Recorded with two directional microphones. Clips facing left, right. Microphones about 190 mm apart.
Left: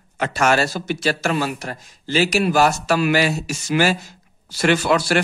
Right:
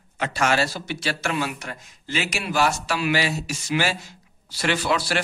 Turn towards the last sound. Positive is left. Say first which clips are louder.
# left 6 dB
turn(degrees=50)  # may be behind; listen again after turning